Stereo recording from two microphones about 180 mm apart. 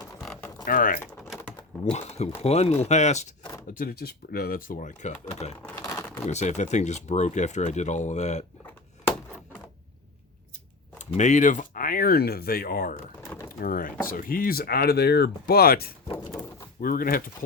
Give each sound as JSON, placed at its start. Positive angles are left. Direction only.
{"t": 0.2, "sound": "a sound", "side_deg": 0}
{"t": 0.6, "sound": "speech", "side_deg": 50}
{"t": 1.8, "sound": "speech", "side_deg": 40}
{"t": 3.8, "sound": "speech", "side_deg": 60}
{"t": 5.8, "sound": "crumpling", "side_deg": 15}
{"t": 6.2, "sound": "speech", "side_deg": 40}
{"t": 10.9, "sound": "speech", "side_deg": 40}